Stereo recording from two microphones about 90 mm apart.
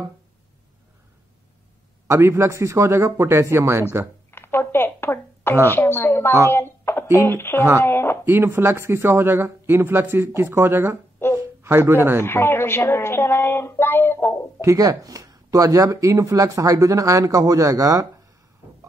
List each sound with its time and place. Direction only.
2.0 s speech: 30° right (ahead or behind)
4.3 s a sound: 25° left (ahead or behind)
5.7 s a woman's voice: 25° left (ahead or behind)
8.3 s speech: 25° right (ahead or behind)
11.3 s a sound: 30° right (ahead or behind)
12.2 s a woman's voice: 25° left (ahead or behind)
14.6 s speech: 40° right (ahead or behind)